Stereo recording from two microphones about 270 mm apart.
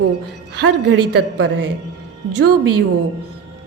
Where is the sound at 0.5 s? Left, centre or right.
Right.